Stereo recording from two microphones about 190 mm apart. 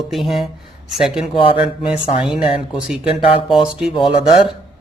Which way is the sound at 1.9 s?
5° right (ahead or behind).